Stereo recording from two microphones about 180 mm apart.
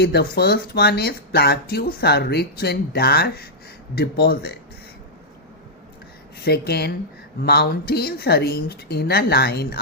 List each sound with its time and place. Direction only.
0.0 s speech: 65° left (ahead or behind)
6.4 s speech: 60° left (ahead or behind)